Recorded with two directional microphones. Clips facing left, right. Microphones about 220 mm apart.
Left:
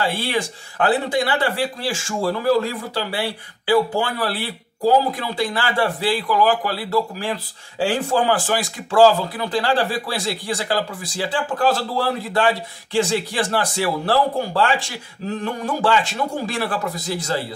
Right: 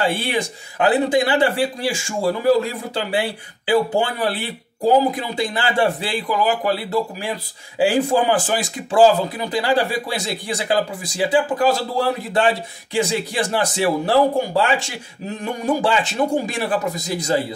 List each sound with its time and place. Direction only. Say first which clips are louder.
0.1 s a man's voice: right 1 dB; 20° right (ahead or behind)
3.6 s a man's voice: even; 15° right (ahead or behind)